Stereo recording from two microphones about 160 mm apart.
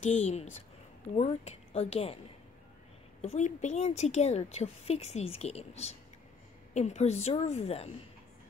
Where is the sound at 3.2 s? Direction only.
45° left (ahead or behind).